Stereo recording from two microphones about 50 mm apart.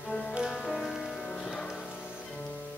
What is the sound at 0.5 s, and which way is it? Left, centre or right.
Music, centre.